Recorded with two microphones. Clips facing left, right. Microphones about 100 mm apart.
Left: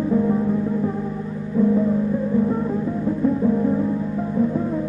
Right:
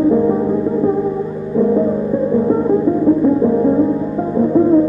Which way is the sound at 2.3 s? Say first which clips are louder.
Right 9 dB; 40° right (ahead or behind).